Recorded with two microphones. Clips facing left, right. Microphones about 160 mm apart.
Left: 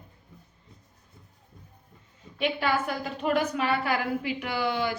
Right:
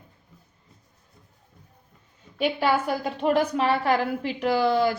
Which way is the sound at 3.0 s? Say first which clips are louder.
Right 4 dB; 35° right (ahead or behind).